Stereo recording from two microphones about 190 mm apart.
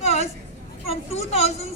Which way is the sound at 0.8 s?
35° left (ahead or behind).